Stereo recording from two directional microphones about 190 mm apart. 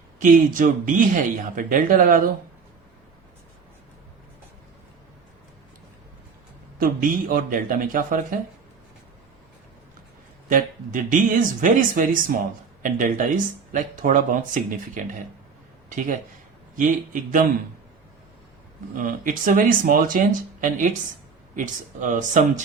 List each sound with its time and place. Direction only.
0.2 s speech: 45° right (ahead or behind)
6.7 s speech: 45° right (ahead or behind)
10.5 s speech: 45° right (ahead or behind)
16.7 s speech: 45° right (ahead or behind)
18.9 s speech: 45° right (ahead or behind)